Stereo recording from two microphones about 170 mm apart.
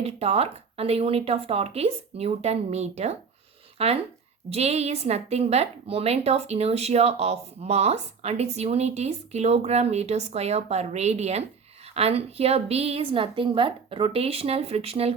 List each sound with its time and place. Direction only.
0.0 s a woman's voice: 35° right (ahead or behind)